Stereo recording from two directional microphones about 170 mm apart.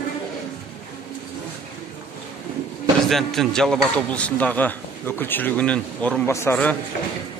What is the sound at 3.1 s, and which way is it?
A man's voice, centre (ahead or behind).